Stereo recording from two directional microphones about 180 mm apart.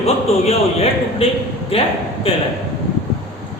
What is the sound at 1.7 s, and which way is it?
Speech, 30° left (ahead or behind).